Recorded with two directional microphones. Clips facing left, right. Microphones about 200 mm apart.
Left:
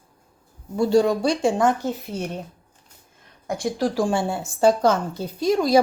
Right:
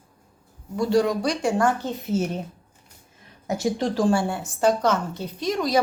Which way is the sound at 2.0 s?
5° right (ahead or behind).